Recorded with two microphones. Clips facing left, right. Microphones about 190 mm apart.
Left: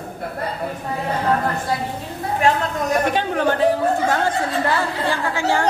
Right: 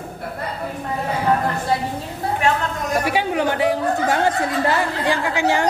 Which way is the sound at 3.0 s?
10° right (ahead or behind).